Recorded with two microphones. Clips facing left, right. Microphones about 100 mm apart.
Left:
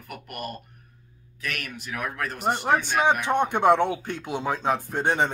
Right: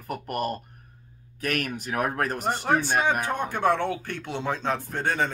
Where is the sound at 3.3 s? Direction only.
25° left (ahead or behind).